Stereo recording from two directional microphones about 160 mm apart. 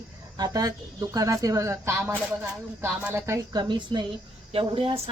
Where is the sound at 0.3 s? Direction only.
25° right (ahead or behind).